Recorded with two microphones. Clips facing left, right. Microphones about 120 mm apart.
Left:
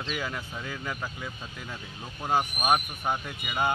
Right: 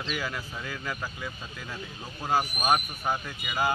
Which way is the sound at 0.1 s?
20° left (ahead or behind).